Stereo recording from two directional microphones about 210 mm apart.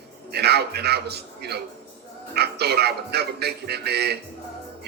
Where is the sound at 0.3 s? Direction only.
50° right (ahead or behind).